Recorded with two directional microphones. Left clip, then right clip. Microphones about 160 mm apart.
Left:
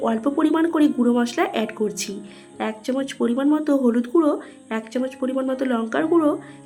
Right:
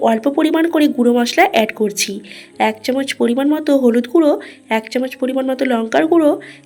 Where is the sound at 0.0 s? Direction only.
15° right (ahead or behind).